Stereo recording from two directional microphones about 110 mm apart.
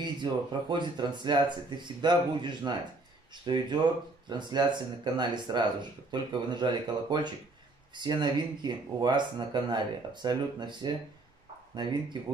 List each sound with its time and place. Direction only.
0.0 s speech: 45° right (ahead or behind)